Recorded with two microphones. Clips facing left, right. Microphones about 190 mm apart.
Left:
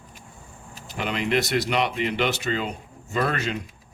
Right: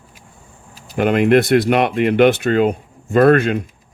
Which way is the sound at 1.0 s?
55° right (ahead or behind).